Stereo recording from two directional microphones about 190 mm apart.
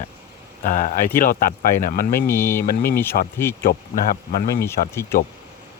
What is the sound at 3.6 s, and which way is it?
Speech, 50° left (ahead or behind).